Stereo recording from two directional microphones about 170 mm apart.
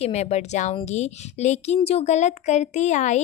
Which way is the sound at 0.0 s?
40° left (ahead or behind).